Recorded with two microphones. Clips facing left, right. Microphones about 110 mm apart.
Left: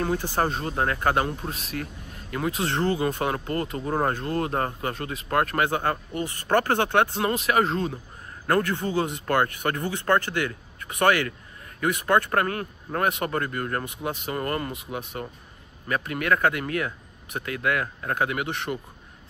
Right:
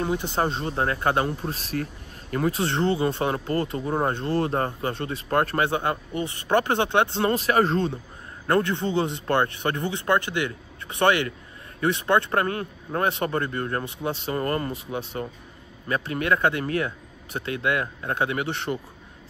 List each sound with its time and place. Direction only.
0.0 s a man's voice: 20° right (ahead or behind)
1.5 s a man's voice: 35° right (ahead or behind)